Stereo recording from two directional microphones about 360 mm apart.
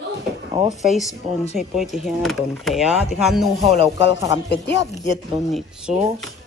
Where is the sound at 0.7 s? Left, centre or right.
Centre.